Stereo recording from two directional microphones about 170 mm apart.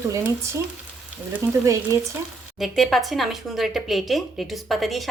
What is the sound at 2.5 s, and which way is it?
Speech, centre (ahead or behind).